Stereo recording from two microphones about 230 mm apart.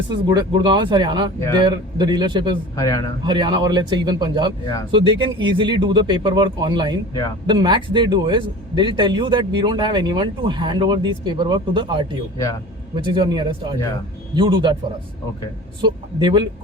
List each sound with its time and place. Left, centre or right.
0.3 s speech: centre
2.7 s a man's voice: centre
3.2 s speech: centre
13.1 s speech: centre
15.8 s speech: centre